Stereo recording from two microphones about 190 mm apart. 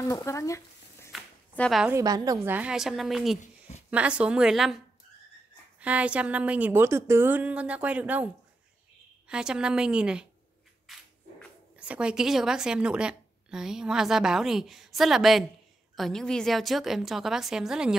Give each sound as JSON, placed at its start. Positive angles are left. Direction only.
{"t": 0.0, "sound": "speech", "side_deg": 15}
{"t": 1.5, "sound": "speech", "side_deg": 5}
{"t": 1.9, "sound": "a woman's voice", "side_deg": -15}
{"t": 3.3, "sound": "a sound", "side_deg": 35}
{"t": 3.9, "sound": "a woman's voice", "side_deg": -5}
{"t": 9.3, "sound": "speech", "side_deg": -5}
{"t": 10.9, "sound": "a sound", "side_deg": 0}
{"t": 11.7, "sound": "speech", "side_deg": -5}